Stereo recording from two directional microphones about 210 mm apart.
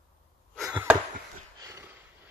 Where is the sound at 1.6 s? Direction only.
10° right (ahead or behind).